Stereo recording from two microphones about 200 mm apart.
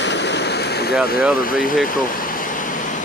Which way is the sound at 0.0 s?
60° left (ahead or behind).